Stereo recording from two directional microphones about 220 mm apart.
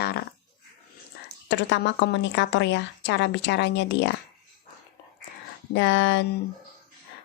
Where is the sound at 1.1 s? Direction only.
45° left (ahead or behind).